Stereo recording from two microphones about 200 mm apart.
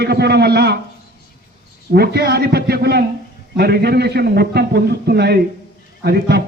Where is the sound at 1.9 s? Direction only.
55° right (ahead or behind).